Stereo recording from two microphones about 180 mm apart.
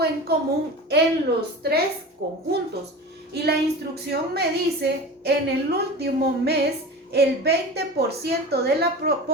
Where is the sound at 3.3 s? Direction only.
60° right (ahead or behind).